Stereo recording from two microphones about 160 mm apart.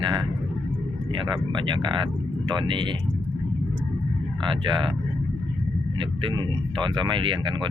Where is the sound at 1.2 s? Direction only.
30° right (ahead or behind).